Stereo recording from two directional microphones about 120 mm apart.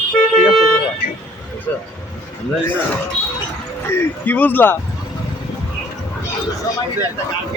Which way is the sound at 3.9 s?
15° left (ahead or behind).